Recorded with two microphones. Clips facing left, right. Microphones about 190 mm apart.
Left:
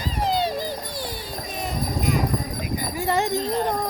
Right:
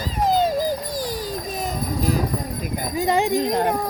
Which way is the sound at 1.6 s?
35° right (ahead or behind).